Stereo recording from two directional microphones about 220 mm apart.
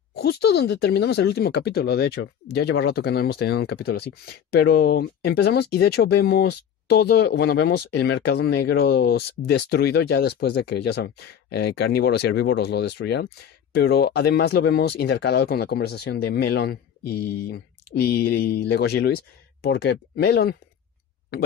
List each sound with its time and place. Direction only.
0.1 s speech: 50° left (ahead or behind)